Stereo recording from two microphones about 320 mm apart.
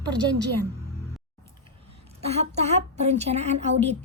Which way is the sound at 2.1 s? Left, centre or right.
Centre.